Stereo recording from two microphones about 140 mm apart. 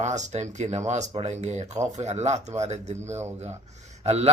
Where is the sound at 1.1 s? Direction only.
45° right (ahead or behind).